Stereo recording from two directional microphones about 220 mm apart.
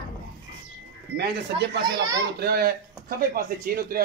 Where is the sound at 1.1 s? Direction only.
50° right (ahead or behind).